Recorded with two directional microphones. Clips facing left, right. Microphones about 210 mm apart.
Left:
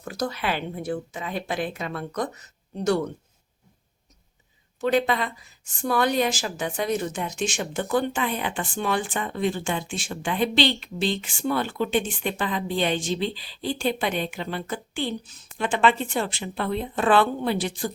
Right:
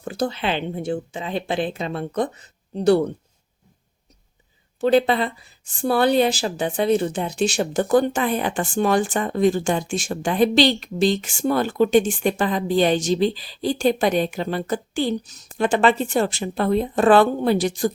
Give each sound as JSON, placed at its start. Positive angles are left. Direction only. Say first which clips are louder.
{"t": 0.0, "sound": "a woman's voice", "louder": "right 4 dB", "side_deg": -30}
{"t": 4.8, "sound": "speech", "louder": "right 5 dB", "side_deg": -30}